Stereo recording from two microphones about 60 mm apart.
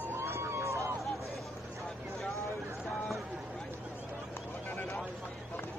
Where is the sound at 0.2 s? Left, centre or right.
Right.